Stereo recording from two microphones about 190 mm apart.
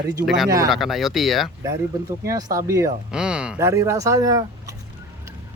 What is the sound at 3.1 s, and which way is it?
Speech, 5° right (ahead or behind).